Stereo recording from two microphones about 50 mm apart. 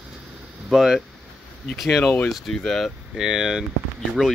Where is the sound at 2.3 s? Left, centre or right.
Centre.